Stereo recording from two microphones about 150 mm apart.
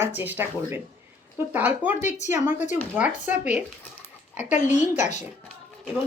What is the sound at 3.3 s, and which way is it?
Speech, 10° right (ahead or behind).